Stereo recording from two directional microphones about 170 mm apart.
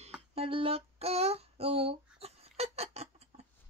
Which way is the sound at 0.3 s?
35° right (ahead or behind).